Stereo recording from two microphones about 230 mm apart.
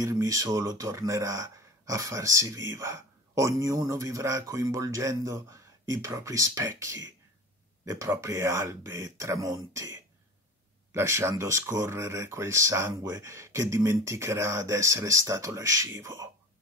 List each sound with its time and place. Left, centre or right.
0.0 s speech: centre
10.9 s speech: centre